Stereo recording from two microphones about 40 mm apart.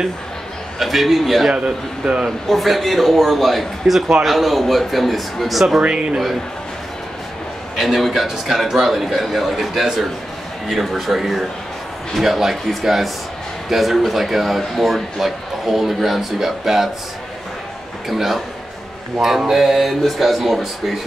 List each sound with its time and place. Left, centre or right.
0.7 s speech: centre
2.4 s speech: centre
5.8 s speech: right
7.7 s speech: centre
18.0 s speech: centre